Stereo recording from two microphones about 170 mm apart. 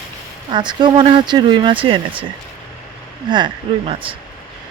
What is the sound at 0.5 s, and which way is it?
Speech, 25° right (ahead or behind).